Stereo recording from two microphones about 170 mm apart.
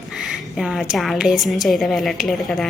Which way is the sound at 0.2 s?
Centre (ahead or behind).